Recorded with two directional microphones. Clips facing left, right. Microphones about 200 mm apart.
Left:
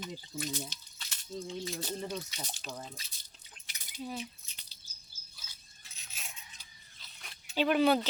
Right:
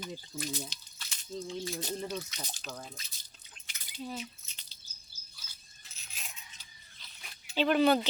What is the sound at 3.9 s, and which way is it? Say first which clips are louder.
Speech: even; 10° left (ahead or behind).